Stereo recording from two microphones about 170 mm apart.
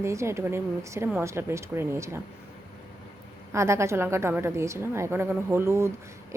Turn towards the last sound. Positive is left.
turn(degrees=-15)  # may be behind; listen again after turning